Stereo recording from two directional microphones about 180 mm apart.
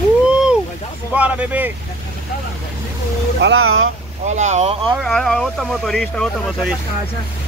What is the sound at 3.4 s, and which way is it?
Speech, 90° right.